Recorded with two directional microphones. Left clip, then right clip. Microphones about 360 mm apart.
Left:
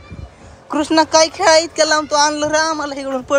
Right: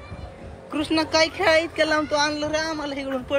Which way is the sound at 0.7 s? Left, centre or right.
Centre.